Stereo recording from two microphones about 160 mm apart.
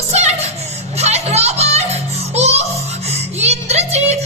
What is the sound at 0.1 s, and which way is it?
Music, 45° right (ahead or behind).